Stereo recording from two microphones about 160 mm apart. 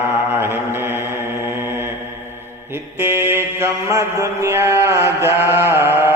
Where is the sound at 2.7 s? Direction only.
15° right (ahead or behind).